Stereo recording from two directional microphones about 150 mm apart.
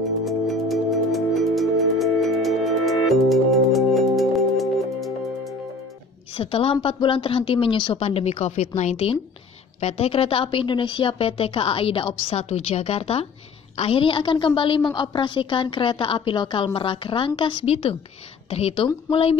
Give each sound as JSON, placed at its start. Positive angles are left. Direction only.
{"t": 0.2, "sound": "music", "side_deg": 0}
{"t": 6.3, "sound": "a woman's voice", "side_deg": 40}